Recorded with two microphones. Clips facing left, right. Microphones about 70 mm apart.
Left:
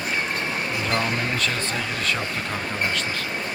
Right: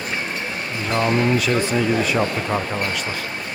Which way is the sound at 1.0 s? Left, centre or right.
Centre.